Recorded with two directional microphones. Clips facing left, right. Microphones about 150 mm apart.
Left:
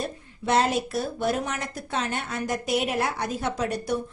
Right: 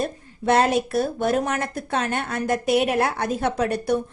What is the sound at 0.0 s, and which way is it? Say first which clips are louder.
Speech: right 6 dB; 55° right (ahead or behind).